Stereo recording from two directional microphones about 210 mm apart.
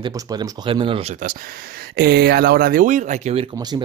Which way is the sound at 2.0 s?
50° right (ahead or behind).